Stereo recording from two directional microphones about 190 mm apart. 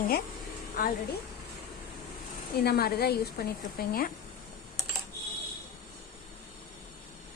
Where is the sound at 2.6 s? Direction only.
55° left (ahead or behind).